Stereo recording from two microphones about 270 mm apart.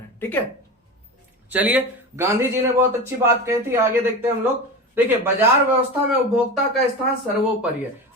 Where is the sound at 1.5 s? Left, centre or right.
Centre.